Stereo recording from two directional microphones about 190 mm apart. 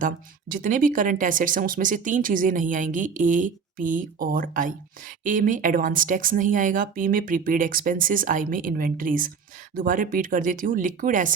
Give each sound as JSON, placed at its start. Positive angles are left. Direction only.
{"t": 0.0, "sound": "speech", "side_deg": -45}